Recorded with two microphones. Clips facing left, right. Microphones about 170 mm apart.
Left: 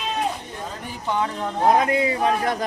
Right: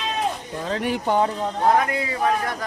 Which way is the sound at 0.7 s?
80° right.